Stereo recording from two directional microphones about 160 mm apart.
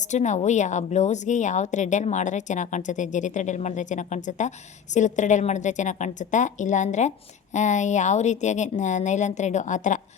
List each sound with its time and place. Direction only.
0.0 s a woman's voice: 50° left (ahead or behind)